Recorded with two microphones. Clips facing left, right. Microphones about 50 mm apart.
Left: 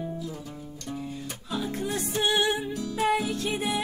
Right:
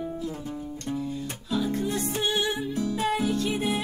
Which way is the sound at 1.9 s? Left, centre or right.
Left.